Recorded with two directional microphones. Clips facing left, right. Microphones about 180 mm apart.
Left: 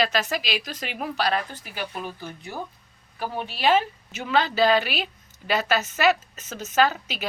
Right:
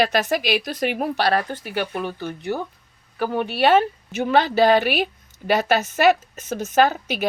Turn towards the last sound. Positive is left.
turn(degrees=-55)  # may be behind; listen again after turning